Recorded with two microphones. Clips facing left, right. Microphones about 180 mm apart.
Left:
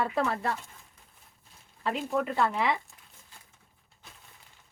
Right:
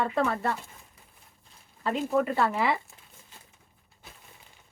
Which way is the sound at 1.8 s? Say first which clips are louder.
Right 3 dB; centre (ahead or behind).